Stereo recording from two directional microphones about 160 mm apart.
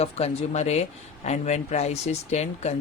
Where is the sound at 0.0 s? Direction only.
40° left (ahead or behind).